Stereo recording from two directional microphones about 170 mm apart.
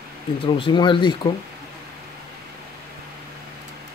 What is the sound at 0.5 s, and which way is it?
Speech, 30° left (ahead or behind).